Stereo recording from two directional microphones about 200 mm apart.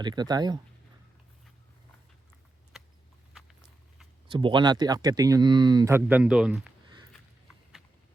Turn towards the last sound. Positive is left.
turn(degrees=-5)  # may be behind; listen again after turning